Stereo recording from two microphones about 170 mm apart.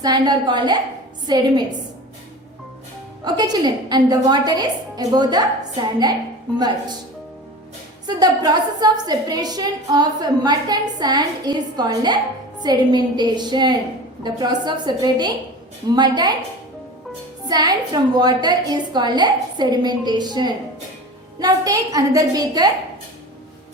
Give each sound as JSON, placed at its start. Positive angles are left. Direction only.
{"t": 0.0, "sound": "a woman's voice", "side_deg": -25}
{"t": 3.2, "sound": "a woman's voice", "side_deg": -25}
{"t": 6.6, "sound": "a woman's voice", "side_deg": -25}
{"t": 8.0, "sound": "a woman's voice", "side_deg": -25}
{"t": 17.5, "sound": "a woman's voice", "side_deg": -25}